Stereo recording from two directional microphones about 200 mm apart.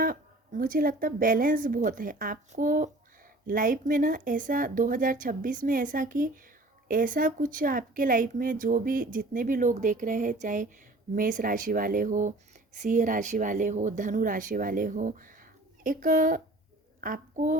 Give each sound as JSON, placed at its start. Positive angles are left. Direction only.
{"t": 0.0, "sound": "a child's voice", "side_deg": -45}